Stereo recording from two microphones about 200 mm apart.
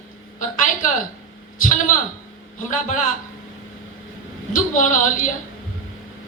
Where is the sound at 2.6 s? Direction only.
40° left (ahead or behind).